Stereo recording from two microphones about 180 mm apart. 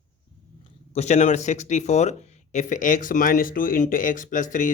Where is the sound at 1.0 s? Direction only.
40° left (ahead or behind).